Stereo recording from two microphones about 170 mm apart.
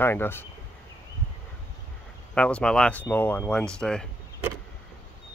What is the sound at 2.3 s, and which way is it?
Speech, 5° left (ahead or behind).